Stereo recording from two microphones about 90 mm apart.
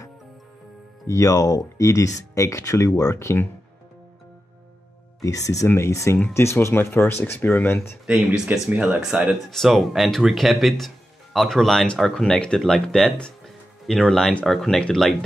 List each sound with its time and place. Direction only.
1.0 s speech: 35° left (ahead or behind)
5.2 s speech: 40° left (ahead or behind)
8.1 s speech: 15° right (ahead or behind)
9.2 s speech: centre (ahead or behind)